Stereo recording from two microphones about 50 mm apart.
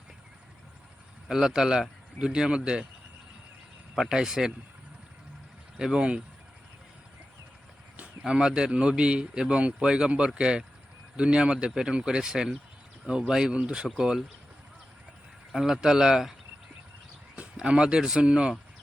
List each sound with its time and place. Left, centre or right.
1.3 s speech: centre
4.1 s speech: centre
5.8 s speech: centre
8.2 s speech: centre
15.5 s speech: centre
17.6 s speech: centre